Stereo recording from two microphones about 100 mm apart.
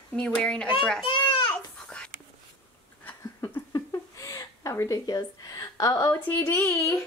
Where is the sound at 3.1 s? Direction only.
25° left (ahead or behind).